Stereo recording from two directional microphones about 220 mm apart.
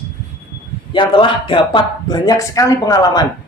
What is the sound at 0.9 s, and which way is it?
Speech, 20° left (ahead or behind).